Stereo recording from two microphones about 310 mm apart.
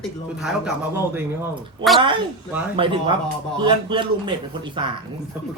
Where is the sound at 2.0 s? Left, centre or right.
Centre.